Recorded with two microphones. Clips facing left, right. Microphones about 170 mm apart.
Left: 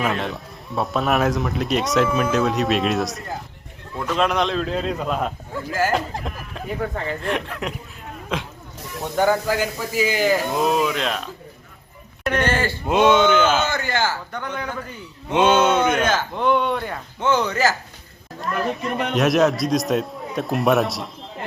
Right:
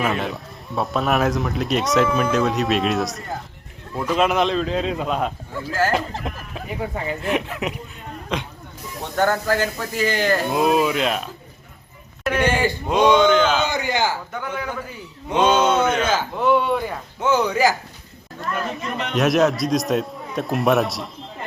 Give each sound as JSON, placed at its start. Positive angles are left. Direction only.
{"t": 0.0, "sound": "speech", "side_deg": 0}
{"t": 5.7, "sound": "speech", "side_deg": 10}
{"t": 6.2, "sound": "speech", "side_deg": -5}
{"t": 10.5, "sound": "speech", "side_deg": -5}
{"t": 12.9, "sound": "speech", "side_deg": 5}
{"t": 13.7, "sound": "speech", "side_deg": -15}
{"t": 14.3, "sound": "speech", "side_deg": -5}
{"t": 15.4, "sound": "speech", "side_deg": 10}
{"t": 16.0, "sound": "speech", "side_deg": -5}
{"t": 19.1, "sound": "speech", "side_deg": 0}